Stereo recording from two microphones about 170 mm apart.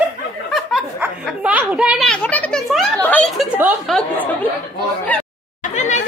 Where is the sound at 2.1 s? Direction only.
10° left (ahead or behind).